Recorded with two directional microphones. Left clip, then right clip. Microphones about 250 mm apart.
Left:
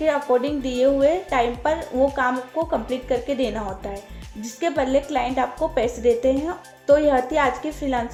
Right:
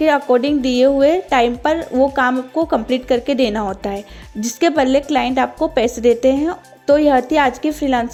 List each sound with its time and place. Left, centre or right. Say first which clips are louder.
0.0 s speech: right 6 dB; right